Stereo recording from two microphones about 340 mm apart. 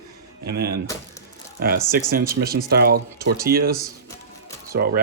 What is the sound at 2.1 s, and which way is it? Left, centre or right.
Speech, right.